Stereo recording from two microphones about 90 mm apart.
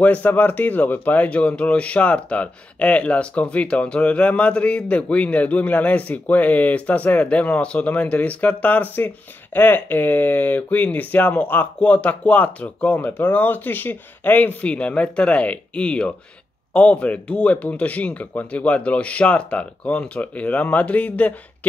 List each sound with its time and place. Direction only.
0.0 s speech: 15° left (ahead or behind)